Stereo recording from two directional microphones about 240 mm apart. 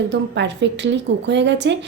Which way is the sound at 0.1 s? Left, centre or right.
Right.